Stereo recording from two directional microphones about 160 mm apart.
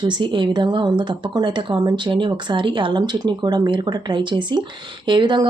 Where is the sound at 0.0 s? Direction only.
30° right (ahead or behind).